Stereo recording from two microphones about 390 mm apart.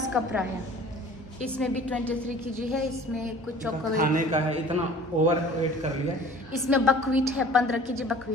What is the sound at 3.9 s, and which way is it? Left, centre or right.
A man's voice, right.